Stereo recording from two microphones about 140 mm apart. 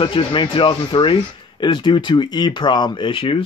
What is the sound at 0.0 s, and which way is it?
Speech, 35° left (ahead or behind).